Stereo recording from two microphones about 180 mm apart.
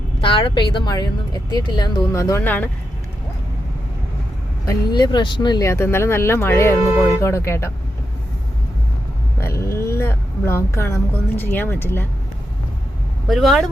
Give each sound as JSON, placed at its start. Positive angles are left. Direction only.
{"t": 0.2, "sound": "a woman's voice", "side_deg": 30}
{"t": 4.6, "sound": "speech", "side_deg": 20}
{"t": 9.4, "sound": "speech", "side_deg": 15}
{"t": 13.2, "sound": "speech", "side_deg": 0}